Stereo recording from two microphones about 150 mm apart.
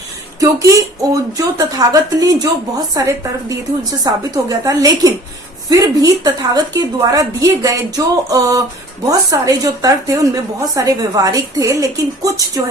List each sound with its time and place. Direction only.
0.3 s a woman's voice: 20° right (ahead or behind)